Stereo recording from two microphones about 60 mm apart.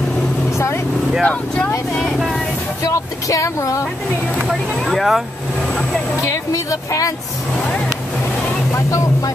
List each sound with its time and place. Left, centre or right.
1.2 s speech: centre
2.1 s vehicle: centre
2.8 s speech: left
4.5 s speech: centre
6.2 s speech: left
8.7 s speech: left